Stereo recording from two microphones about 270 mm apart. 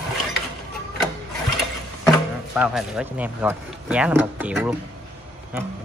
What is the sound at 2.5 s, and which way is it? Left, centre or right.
Speech, centre.